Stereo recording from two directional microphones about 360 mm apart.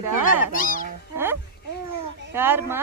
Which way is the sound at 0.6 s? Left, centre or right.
Left.